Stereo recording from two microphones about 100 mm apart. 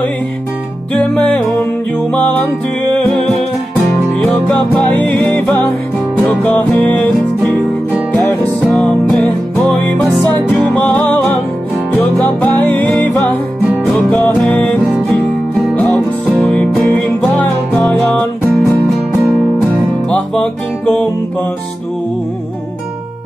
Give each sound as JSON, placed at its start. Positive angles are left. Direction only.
{"t": 0.9, "sound": "music", "side_deg": 10}
{"t": 3.2, "sound": "music", "side_deg": 0}
{"t": 4.2, "sound": "music", "side_deg": 10}
{"t": 8.1, "sound": "music", "side_deg": 15}
{"t": 13.9, "sound": "music", "side_deg": 15}
{"t": 20.1, "sound": "music", "side_deg": 10}